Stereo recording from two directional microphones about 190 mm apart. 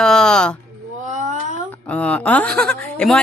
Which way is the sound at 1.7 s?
5° left (ahead or behind).